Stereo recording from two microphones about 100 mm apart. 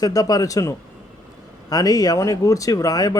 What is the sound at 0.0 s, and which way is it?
Speech, 40° left (ahead or behind).